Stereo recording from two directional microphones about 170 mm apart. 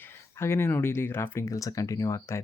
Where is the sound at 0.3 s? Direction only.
15° left (ahead or behind).